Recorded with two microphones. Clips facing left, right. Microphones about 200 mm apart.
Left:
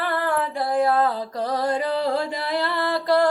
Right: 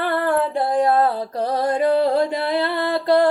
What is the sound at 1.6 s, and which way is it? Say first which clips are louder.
Music: right 7 dB; 50° right (ahead or behind).